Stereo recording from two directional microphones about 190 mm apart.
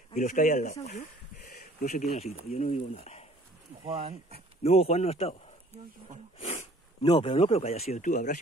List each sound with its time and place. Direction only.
0.1 s speech: 40° left (ahead or behind)
1.4 s insect: 55° left (ahead or behind)
2.1 s speech: 35° left (ahead or behind)
3.8 s speech: 35° right (ahead or behind)
4.6 s speech: 35° left (ahead or behind)
6.4 s a sound: 30° left (ahead or behind)
7.1 s speech: 25° left (ahead or behind); by 8.3 s 40° left (ahead or behind)